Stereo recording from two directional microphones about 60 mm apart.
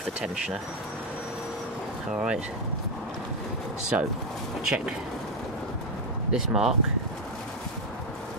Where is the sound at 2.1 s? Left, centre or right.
Centre.